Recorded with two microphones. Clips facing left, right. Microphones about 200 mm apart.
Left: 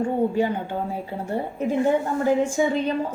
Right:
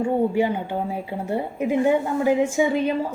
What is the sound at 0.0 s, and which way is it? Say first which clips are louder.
A woman's voice: right 1 dB; 10° right (ahead or behind).